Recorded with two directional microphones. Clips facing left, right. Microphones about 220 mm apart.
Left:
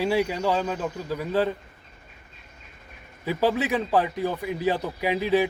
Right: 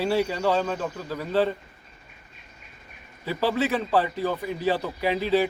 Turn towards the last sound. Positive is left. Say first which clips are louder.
# even
turn(degrees=15)  # may be behind; listen again after turning